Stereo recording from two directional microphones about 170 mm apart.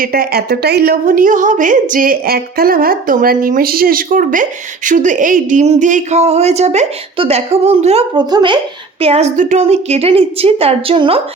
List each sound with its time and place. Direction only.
0.0 s a woman's voice: 60° right (ahead or behind); by 11.2 s 30° right (ahead or behind)